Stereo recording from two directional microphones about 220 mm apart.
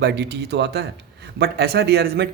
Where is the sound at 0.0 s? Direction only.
50° right (ahead or behind).